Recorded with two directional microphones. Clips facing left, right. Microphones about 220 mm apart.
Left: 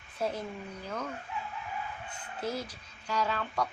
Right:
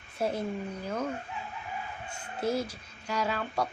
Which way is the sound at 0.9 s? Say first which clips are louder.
Right 5 dB; 30° right (ahead or behind).